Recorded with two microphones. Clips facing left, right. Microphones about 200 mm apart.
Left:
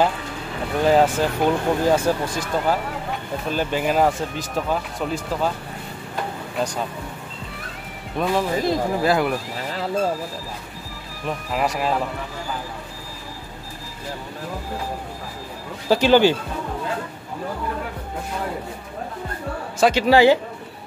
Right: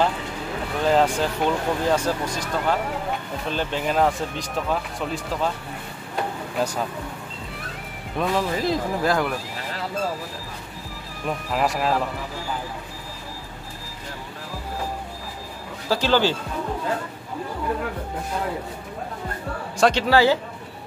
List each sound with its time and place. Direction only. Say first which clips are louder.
0.8 s speech: left 3 dB; 5° left (ahead or behind)
6.5 s speech: even; 5° right (ahead or behind)
8.2 s speech: left 2 dB; 5° left (ahead or behind)
11.2 s speech: even; centre (ahead or behind)
15.9 s speech: left 5 dB; 15° left (ahead or behind)
19.8 s speech: left 3 dB; 10° left (ahead or behind)